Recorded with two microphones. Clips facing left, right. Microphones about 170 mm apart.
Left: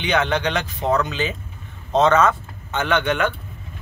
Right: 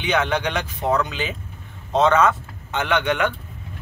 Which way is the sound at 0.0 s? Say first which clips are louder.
Left 1 dB; 10° right (ahead or behind).